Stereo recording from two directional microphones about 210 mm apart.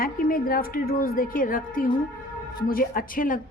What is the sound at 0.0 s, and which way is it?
A woman's voice, 45° left (ahead or behind).